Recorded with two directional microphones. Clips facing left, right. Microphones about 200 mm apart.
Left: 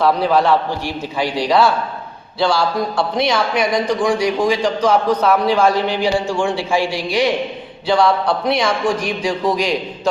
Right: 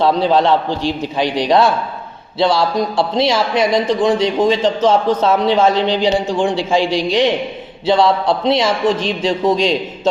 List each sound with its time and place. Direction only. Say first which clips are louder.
0.0 s a man's voice: right 2 dB; 25° right (ahead or behind)